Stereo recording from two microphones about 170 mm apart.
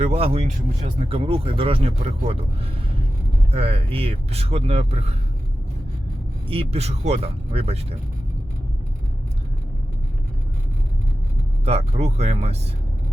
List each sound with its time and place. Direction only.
0.0 s speech: 40° right (ahead or behind)
3.5 s speech: 35° right (ahead or behind)
6.5 s speech: 35° right (ahead or behind)
11.6 s speech: 35° right (ahead or behind)